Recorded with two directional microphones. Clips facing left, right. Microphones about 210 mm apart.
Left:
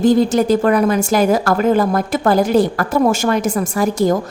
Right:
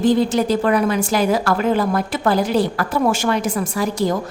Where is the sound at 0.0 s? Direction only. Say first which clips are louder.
Left 3 dB; 45° left (ahead or behind).